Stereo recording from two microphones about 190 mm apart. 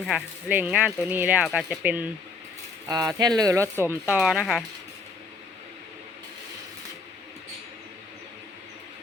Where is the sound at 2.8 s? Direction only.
20° right (ahead or behind); by 4.6 s centre (ahead or behind).